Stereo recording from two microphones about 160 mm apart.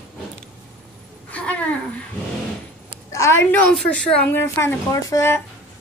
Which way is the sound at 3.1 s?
20° left (ahead or behind).